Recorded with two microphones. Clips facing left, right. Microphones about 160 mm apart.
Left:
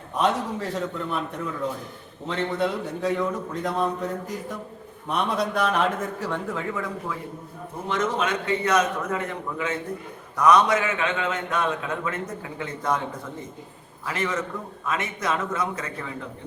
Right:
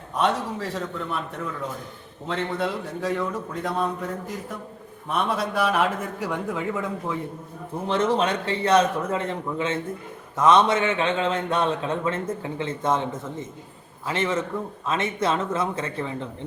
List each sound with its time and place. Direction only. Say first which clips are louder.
0.2 s a man's voice: even; centre (ahead or behind)
2.2 s a man's voice: left 1 dB; centre (ahead or behind)
5.0 s a man's voice: even; centre (ahead or behind)
7.9 s a man's voice: right 3 dB; 30° right (ahead or behind)
14.0 s a man's voice: right 2 dB; 25° right (ahead or behind)